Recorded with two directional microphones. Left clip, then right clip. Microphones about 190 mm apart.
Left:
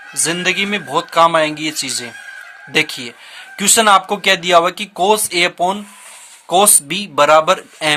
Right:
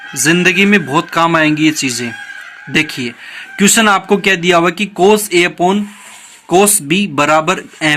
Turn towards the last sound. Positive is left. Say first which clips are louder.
# right 1 dB
turn(degrees=35)  # may be behind; listen again after turning